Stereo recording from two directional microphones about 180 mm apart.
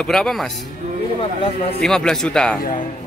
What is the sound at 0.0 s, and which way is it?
Speech, 5° left (ahead or behind).